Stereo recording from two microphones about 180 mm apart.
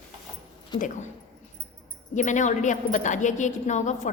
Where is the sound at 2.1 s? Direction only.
45° left (ahead or behind).